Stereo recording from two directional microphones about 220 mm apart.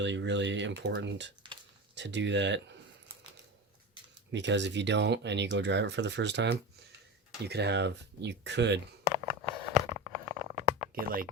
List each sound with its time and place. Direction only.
0.0 s speech: 55° right (ahead or behind)
4.3 s speech: 55° right (ahead or behind)
9.1 s a sound: 20° right (ahead or behind)
10.9 s speech: 40° right (ahead or behind)